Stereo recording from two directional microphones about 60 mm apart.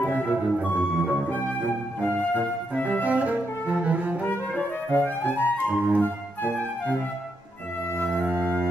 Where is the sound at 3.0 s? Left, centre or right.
Right.